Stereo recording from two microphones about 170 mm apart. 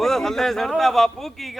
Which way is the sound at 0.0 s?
Centre (ahead or behind).